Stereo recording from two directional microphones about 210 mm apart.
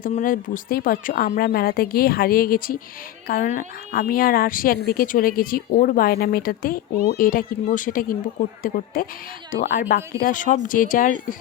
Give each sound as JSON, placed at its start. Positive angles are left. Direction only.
{"t": 0.0, "sound": "speech", "side_deg": 40}